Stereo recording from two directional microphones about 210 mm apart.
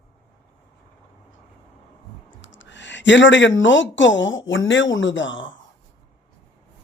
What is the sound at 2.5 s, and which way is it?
Speech, 60° left (ahead or behind).